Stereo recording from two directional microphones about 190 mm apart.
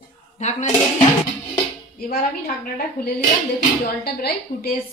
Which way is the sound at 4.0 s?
55° left (ahead or behind).